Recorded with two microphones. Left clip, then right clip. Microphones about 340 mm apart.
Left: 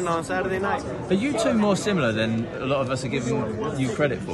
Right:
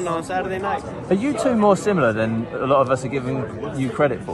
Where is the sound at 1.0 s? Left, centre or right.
Centre.